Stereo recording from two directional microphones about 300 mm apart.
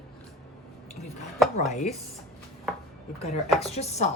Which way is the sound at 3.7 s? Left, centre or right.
Left.